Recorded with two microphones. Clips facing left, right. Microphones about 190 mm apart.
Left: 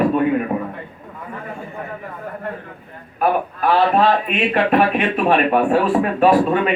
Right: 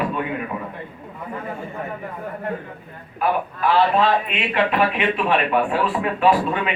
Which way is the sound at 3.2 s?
45° left (ahead or behind).